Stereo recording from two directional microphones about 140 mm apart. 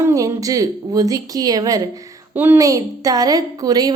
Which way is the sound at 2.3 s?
15° right (ahead or behind).